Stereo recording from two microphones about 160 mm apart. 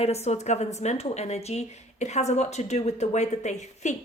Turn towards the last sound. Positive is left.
turn(degrees=45)  # may be behind; listen again after turning